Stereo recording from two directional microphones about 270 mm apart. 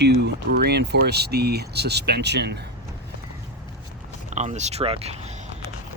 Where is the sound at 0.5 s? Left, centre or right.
Right.